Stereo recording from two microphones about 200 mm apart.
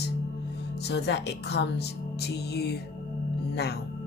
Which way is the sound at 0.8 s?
55° left (ahead or behind).